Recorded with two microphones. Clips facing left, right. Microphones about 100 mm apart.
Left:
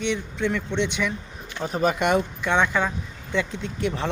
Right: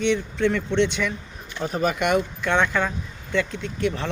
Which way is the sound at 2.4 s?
15° left (ahead or behind).